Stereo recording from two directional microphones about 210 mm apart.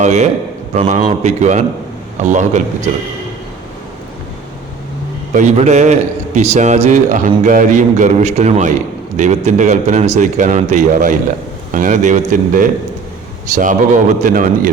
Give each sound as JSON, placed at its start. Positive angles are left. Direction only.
{"t": 0.0, "sound": "a man's voice", "side_deg": -35}
{"t": 5.3, "sound": "a man's voice", "side_deg": -35}